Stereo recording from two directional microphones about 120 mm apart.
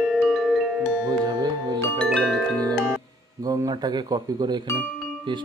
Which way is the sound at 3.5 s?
30° right (ahead or behind).